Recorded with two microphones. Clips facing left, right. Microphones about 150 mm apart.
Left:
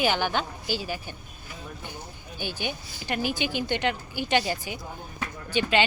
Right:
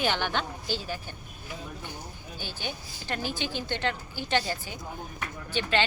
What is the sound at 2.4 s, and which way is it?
A woman's voice, 15° left (ahead or behind).